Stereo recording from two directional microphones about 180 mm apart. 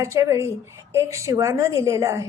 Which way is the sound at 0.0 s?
15° right (ahead or behind).